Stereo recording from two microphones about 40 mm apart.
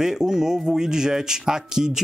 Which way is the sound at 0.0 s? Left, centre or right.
Centre.